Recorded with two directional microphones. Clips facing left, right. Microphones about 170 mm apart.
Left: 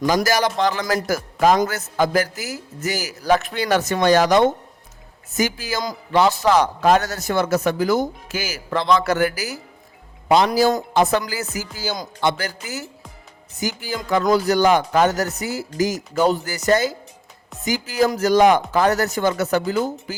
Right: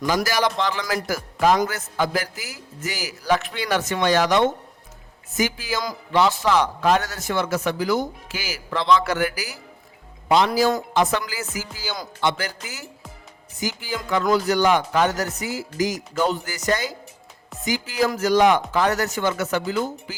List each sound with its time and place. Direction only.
0.0 s a man's voice: 45° left (ahead or behind)
13.6 s a man's voice: 40° left (ahead or behind)